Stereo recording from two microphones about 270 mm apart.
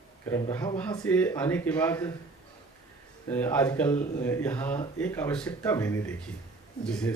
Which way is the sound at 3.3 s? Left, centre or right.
Centre.